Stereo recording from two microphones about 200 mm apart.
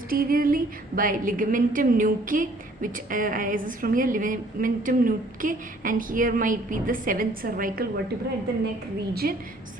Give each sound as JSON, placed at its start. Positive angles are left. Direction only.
{"t": 0.1, "sound": "a woman's voice", "side_deg": -45}
{"t": 9.2, "sound": "a woman's voice", "side_deg": -50}